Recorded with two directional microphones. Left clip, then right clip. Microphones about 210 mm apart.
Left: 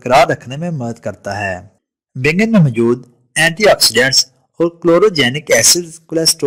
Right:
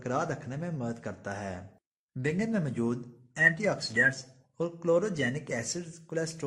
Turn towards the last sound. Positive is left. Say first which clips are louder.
# left 19 dB
turn(degrees=45)  # may be behind; listen again after turning